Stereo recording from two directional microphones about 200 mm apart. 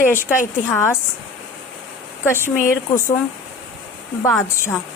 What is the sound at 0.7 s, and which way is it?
Speech, 10° left (ahead or behind).